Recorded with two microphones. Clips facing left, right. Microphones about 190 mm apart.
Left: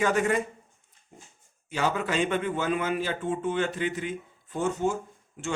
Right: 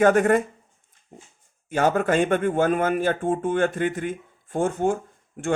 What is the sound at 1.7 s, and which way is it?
Speech, 50° right (ahead or behind).